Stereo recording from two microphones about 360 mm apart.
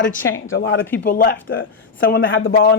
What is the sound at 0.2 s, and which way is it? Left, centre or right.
A man's voice, left.